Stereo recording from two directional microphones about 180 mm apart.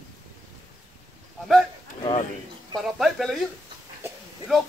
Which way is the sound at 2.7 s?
Centre (ahead or behind).